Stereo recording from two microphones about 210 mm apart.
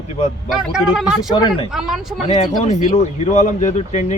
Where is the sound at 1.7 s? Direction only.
Centre (ahead or behind).